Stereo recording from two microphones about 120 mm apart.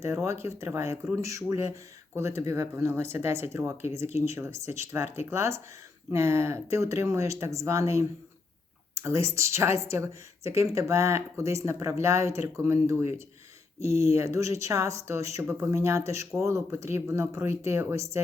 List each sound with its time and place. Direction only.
0.0 s speech: 25° right (ahead or behind)